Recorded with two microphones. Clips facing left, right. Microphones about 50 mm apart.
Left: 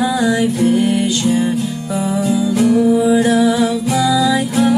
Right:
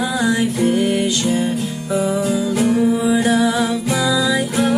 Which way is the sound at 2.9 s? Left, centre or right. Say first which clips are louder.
Left 3 dB; centre.